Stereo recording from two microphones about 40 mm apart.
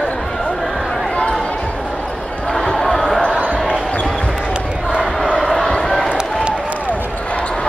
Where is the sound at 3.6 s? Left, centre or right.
Centre.